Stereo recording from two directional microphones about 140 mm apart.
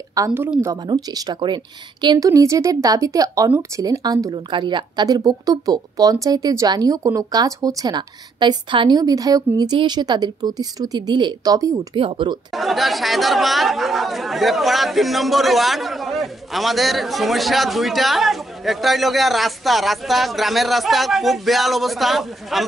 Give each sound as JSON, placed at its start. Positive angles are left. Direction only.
{"t": 0.3, "sound": "speech", "side_deg": -10}
{"t": 0.8, "sound": "speech", "side_deg": -25}
{"t": 11.9, "sound": "speech", "side_deg": -35}
{"t": 12.5, "sound": "speech", "side_deg": 0}